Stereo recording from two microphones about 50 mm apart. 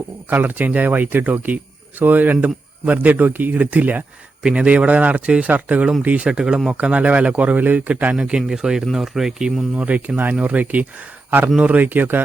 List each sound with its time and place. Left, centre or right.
0.3 s speech: right
4.4 s speech: right
8.1 s speech: centre
9.7 s speech: right